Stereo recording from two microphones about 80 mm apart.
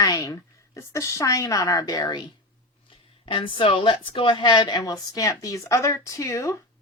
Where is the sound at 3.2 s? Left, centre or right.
Left.